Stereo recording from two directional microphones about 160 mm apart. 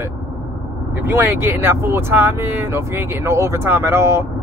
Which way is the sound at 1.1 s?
15° right (ahead or behind).